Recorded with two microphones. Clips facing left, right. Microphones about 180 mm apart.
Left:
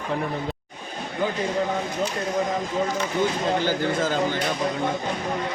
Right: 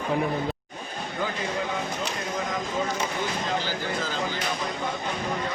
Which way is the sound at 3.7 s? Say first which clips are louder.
Left 7 dB; 50° left (ahead or behind).